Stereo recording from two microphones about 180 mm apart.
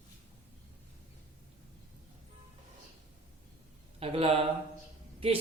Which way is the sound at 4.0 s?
30° right (ahead or behind).